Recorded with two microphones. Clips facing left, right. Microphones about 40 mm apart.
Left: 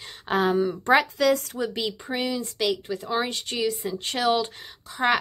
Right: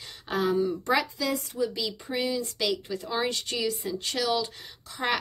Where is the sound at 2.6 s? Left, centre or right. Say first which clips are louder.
Left 3 dB; left.